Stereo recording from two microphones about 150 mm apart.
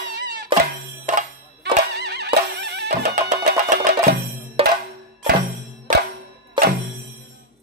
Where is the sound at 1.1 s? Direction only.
55° right (ahead or behind).